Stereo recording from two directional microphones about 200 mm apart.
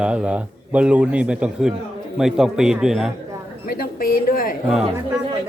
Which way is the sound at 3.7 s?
45° left (ahead or behind).